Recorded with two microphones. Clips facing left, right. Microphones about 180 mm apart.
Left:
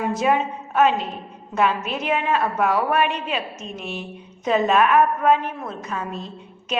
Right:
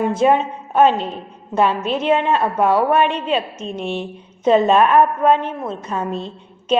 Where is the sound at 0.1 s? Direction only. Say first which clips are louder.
Right 5 dB; 30° right (ahead or behind).